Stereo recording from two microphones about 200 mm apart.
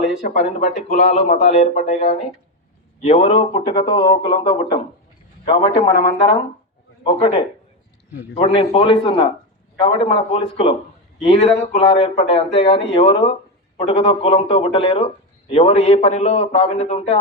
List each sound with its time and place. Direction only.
0.2 s speech: 45° left (ahead or behind)
0.6 s a man's voice: 35° left (ahead or behind)
7.0 s a man's voice: 25° left (ahead or behind)